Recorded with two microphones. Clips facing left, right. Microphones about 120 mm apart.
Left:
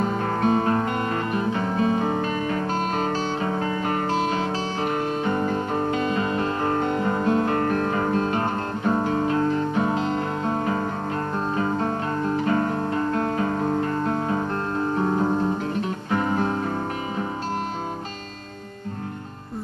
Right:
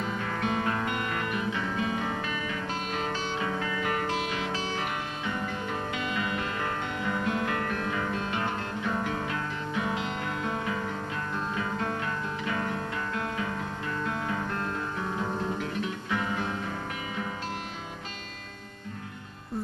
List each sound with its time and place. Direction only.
0.0 s guitar: 40° left (ahead or behind)
5.2 s music: 40° left (ahead or behind)
11.3 s guitar: 35° left (ahead or behind)